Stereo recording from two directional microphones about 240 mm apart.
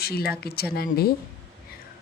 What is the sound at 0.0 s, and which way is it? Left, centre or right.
Speech, left.